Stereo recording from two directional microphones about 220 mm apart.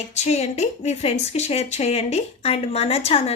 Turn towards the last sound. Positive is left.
turn(degrees=25)  # may be behind; listen again after turning